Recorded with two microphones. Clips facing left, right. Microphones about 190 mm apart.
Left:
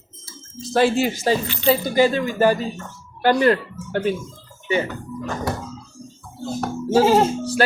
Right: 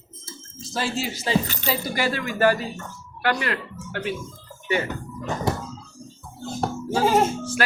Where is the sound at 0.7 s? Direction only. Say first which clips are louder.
Left 10 dB; 60° left (ahead or behind).